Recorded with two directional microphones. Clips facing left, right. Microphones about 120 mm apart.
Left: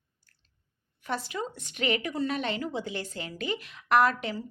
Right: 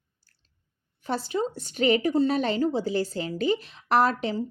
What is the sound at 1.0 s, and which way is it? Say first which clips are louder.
A woman's voice: right 5 dB; 30° right (ahead or behind).